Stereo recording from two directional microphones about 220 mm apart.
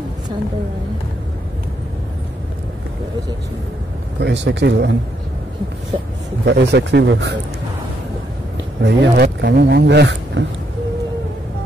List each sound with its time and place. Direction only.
4.2 s speech: 55° right (ahead or behind)
6.4 s speech: 50° right (ahead or behind)
8.8 s speech: 50° right (ahead or behind)